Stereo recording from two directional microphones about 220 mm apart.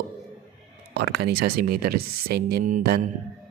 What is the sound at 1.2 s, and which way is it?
Speech, 45° right (ahead or behind).